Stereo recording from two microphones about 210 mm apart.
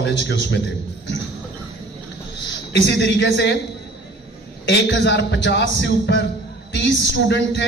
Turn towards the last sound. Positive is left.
turn(degrees=60)  # may be behind; listen again after turning